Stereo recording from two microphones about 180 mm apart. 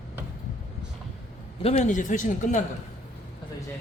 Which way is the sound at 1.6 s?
40° left (ahead or behind).